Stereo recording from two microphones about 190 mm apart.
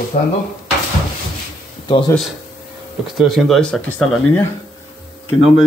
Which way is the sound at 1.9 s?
25° left (ahead or behind).